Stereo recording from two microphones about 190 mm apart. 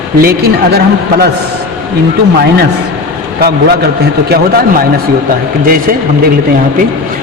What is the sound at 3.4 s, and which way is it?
Speech, 55° right (ahead or behind).